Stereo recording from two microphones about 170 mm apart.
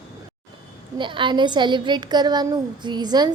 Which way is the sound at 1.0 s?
30° right (ahead or behind).